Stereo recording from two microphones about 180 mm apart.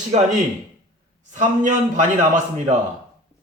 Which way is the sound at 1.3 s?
45° right (ahead or behind).